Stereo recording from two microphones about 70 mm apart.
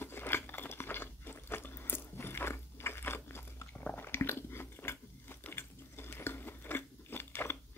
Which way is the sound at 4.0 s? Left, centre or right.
Left.